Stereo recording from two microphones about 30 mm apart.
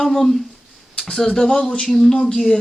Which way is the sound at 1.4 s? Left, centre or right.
Left.